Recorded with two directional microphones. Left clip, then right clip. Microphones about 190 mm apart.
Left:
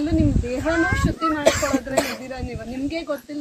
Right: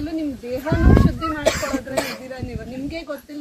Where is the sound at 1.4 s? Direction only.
15° right (ahead or behind).